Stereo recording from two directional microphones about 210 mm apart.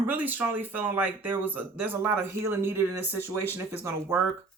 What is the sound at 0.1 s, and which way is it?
Speech, 10° right (ahead or behind).